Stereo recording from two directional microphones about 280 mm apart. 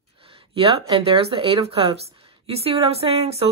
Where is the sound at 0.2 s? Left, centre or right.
Centre.